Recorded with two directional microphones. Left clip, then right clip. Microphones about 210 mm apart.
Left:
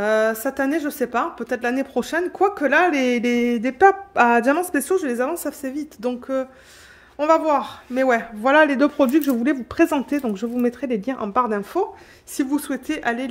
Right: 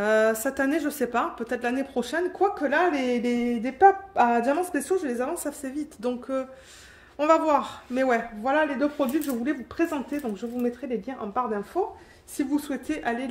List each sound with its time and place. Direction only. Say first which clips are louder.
0.0 s speech: left 3 dB; 20° left (ahead or behind)
7.2 s a woman's voice: left 3 dB; 15° left (ahead or behind)
8.4 s speech: left 8 dB; 50° left (ahead or behind)
12.4 s a woman's voice: left 4 dB; 35° left (ahead or behind)